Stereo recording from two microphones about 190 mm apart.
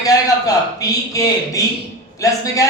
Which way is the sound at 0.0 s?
20° left (ahead or behind).